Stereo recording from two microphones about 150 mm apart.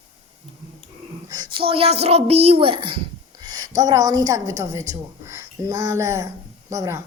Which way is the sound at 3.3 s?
30° right (ahead or behind).